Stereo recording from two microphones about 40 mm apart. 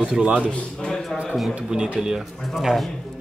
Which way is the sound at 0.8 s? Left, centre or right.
Centre.